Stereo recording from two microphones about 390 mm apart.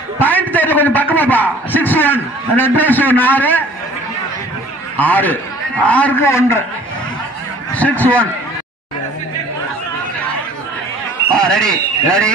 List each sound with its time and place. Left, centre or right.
0.2 s a man's voice: centre
4.9 s a man's voice: centre
7.7 s a man's voice: centre
11.3 s speech: centre